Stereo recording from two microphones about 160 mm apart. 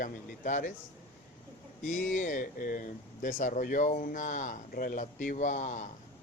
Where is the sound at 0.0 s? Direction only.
55° left (ahead or behind).